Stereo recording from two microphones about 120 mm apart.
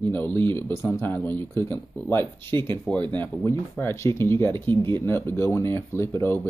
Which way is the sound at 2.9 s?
40° right (ahead or behind).